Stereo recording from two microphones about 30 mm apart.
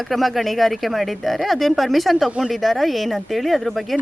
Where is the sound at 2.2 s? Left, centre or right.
Right.